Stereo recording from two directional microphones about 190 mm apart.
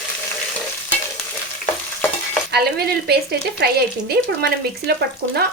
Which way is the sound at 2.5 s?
55° right (ahead or behind).